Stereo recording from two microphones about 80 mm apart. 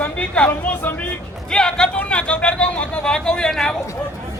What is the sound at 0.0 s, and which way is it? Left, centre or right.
A woman's voice, centre.